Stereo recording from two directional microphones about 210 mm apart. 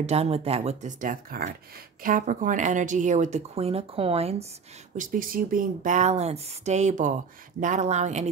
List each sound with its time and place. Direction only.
0.0 s speech: 30° right (ahead or behind)
4.9 s speech: 40° right (ahead or behind)